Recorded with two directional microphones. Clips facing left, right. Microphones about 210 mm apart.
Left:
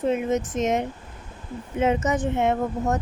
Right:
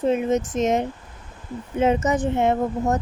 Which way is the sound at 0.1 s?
35° right (ahead or behind).